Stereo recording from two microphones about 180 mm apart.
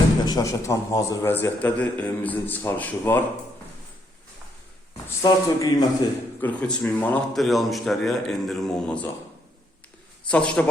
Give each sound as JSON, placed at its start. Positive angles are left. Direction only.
{"t": 0.3, "sound": "a man's voice", "side_deg": 20}
{"t": 5.0, "sound": "speech", "side_deg": 20}
{"t": 6.4, "sound": "speech", "side_deg": 5}
{"t": 10.2, "sound": "a man's voice", "side_deg": 5}